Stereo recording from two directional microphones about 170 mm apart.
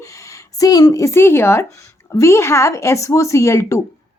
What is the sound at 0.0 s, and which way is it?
A woman's voice, 20° left (ahead or behind).